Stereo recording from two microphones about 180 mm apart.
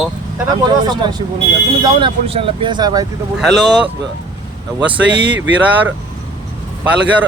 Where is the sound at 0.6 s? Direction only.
25° right (ahead or behind).